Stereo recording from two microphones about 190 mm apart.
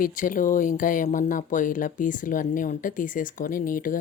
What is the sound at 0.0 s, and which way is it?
Speech, 45° left (ahead or behind).